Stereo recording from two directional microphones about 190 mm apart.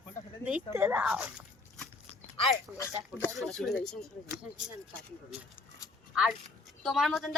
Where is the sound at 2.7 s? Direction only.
Centre (ahead or behind).